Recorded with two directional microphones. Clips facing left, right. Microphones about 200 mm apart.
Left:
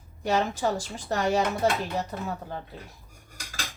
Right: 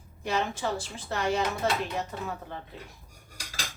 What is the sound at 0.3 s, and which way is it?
A woman's voice, 40° left (ahead or behind).